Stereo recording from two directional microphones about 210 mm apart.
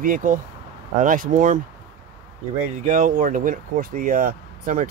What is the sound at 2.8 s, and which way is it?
Speech, 35° right (ahead or behind).